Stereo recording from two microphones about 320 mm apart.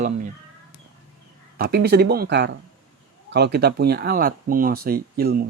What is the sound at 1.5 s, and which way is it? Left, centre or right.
Speech, right.